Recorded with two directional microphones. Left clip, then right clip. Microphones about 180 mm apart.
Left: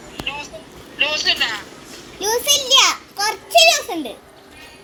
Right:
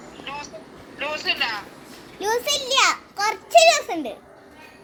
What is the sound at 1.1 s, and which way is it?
Speech, 5° right (ahead or behind).